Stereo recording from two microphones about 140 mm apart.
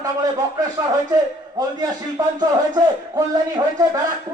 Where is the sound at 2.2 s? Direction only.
25° right (ahead or behind).